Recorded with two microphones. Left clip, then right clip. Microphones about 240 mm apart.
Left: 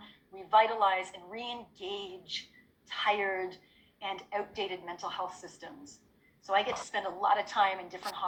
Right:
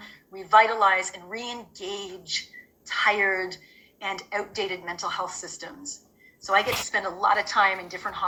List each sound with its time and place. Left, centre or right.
0.0 s a woman's voice: right